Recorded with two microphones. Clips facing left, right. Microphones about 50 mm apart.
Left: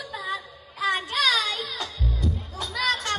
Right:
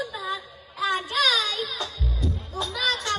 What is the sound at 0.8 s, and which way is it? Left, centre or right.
Music, left.